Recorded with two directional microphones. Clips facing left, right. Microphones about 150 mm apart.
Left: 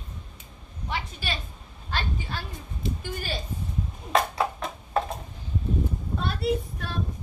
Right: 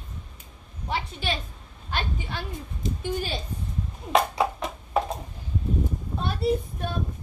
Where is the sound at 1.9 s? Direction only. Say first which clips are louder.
Right 1 dB; 15° right (ahead or behind).